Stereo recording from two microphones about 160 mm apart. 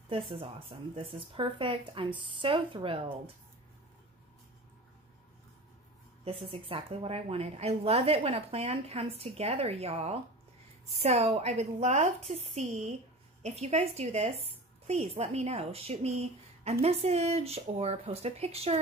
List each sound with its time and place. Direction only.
0.1 s a woman's voice: 35° right (ahead or behind)
6.2 s a woman's voice: 35° right (ahead or behind)